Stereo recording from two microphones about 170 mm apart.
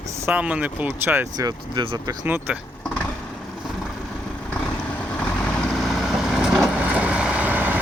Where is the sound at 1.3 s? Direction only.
25° right (ahead or behind).